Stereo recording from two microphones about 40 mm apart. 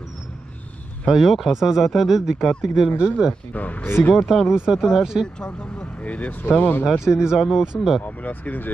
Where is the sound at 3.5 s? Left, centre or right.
Left.